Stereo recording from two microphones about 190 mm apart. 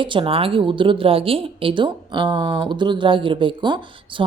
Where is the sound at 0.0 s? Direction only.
25° right (ahead or behind).